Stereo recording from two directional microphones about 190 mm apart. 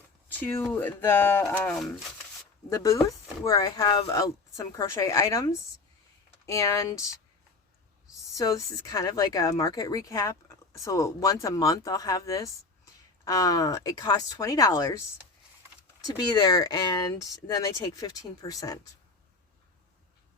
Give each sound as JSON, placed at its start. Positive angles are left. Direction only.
{"t": 0.3, "sound": "speech", "side_deg": 10}
{"t": 8.4, "sound": "speech", "side_deg": 20}
{"t": 16.0, "sound": "speech", "side_deg": 20}